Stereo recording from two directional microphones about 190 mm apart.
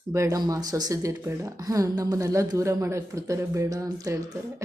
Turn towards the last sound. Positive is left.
turn(degrees=-15)  # may be behind; listen again after turning